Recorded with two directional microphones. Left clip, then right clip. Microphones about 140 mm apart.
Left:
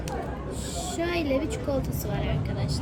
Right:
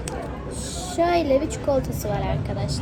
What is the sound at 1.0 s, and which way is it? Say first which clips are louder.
Speech: right 8 dB; 5° left (ahead or behind).